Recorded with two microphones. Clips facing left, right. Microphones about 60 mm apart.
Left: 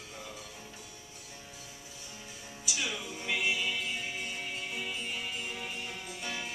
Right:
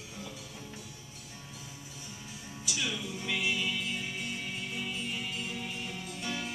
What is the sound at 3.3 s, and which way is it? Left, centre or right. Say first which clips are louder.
Music: left 1 dB; centre.